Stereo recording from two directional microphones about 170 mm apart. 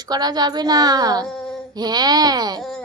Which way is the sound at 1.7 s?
25° right (ahead or behind).